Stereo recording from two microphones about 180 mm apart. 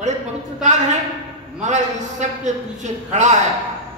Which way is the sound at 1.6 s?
40° right (ahead or behind).